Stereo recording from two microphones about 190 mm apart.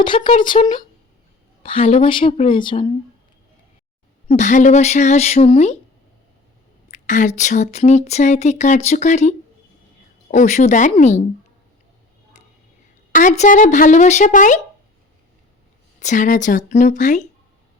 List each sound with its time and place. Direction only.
0.0 s a woman's voice: 25° left (ahead or behind)
0.6 s a woman's voice: 40° left (ahead or behind)
4.3 s speech: 40° left (ahead or behind)
6.9 s speech: 40° left (ahead or behind)
10.3 s speech: 40° left (ahead or behind)
13.1 s speech: 40° left (ahead or behind)
16.0 s speech: 40° left (ahead or behind)